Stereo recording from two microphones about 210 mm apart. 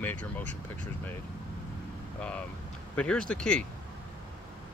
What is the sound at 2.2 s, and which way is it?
Speech, 5° left (ahead or behind).